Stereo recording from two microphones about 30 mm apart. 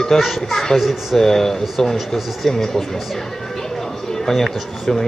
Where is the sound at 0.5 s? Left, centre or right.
Centre.